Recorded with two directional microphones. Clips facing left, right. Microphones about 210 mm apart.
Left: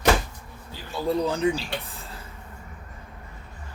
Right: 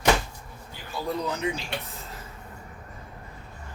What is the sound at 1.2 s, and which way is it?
Speech, 30° left (ahead or behind).